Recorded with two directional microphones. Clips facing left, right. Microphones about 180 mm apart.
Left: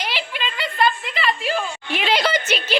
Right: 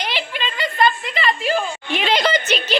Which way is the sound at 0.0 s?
5° left (ahead or behind).